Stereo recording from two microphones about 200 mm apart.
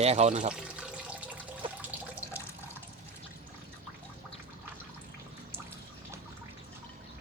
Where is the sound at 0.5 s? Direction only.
5° right (ahead or behind).